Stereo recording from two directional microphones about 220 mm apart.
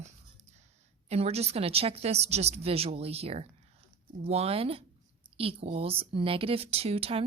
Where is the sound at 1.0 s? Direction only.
30° right (ahead or behind).